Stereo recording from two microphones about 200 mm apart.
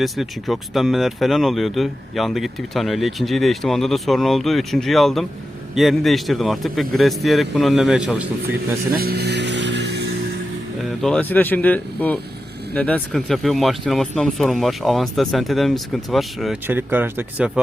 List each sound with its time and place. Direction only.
0.0 s speech: centre (ahead or behind)
8.9 s vehicle: 50° right (ahead or behind)
11.0 s speech: 5° left (ahead or behind)